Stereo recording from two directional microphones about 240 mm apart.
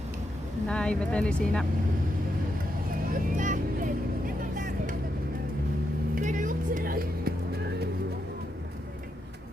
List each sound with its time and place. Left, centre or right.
0.7 s speech: centre
3.1 s vehicle: right
6.1 s speech: right